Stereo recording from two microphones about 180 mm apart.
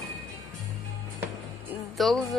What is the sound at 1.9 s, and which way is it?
Speech, centre (ahead or behind).